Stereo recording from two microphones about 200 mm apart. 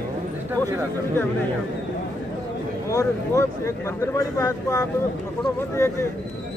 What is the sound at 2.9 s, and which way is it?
Speech, 15° left (ahead or behind).